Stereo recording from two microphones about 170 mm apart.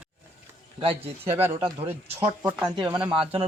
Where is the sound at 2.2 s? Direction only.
5° right (ahead or behind).